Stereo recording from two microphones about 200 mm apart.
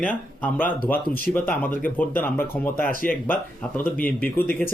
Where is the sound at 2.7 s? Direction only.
45° left (ahead or behind).